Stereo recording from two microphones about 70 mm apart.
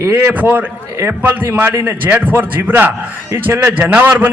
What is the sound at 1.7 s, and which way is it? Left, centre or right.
Speech, right.